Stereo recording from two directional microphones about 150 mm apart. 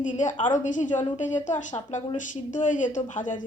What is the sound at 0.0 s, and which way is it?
Speech, 55° left (ahead or behind).